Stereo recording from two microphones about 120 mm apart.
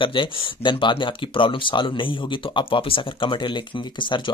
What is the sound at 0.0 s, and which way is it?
Speech, 45° left (ahead or behind).